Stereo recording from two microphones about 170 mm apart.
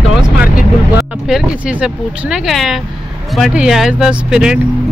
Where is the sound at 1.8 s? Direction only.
Centre (ahead or behind).